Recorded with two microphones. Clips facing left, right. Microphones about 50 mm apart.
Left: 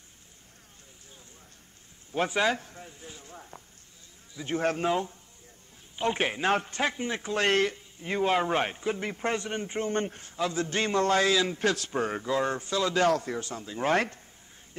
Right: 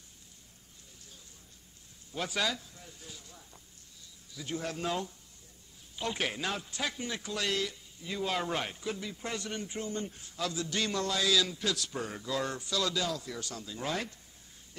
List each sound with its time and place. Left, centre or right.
2.1 s a man's voice: left
2.9 s a sound: left
4.3 s a man's voice: left
4.6 s a man's voice: left
4.8 s a man's voice: left
6.5 s a man's voice: left
9.0 s a man's voice: left
9.4 s a man's voice: left
9.9 s a man's voice: left
10.3 s a man's voice: left
12.9 s a man's voice: left
13.4 s a man's voice: left
13.9 s speech: left